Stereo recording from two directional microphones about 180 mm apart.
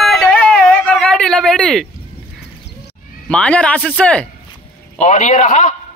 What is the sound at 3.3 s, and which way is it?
A man's voice, 5° left (ahead or behind).